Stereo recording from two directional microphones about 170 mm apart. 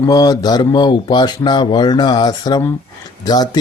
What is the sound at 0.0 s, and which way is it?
Speech, 20° left (ahead or behind).